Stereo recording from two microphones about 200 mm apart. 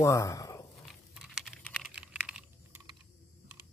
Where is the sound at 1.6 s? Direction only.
5° left (ahead or behind).